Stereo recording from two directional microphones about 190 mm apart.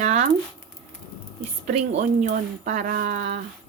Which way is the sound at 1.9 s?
40° right (ahead or behind).